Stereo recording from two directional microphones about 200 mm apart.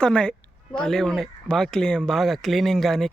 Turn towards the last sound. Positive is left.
turn(degrees=0)  # may be behind; listen again after turning